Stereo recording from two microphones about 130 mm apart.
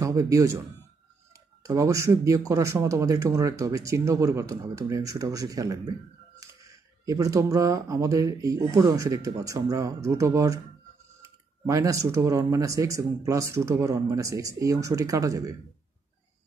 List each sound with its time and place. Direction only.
0.0 s speech: 25° right (ahead or behind)